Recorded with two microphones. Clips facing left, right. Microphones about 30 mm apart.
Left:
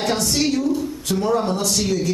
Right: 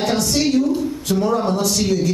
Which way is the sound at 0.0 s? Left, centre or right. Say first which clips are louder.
Right 2 dB; centre.